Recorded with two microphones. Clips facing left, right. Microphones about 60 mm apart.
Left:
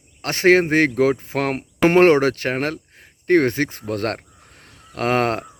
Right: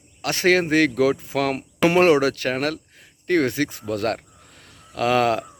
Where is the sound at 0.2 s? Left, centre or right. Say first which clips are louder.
Left 4 dB; left.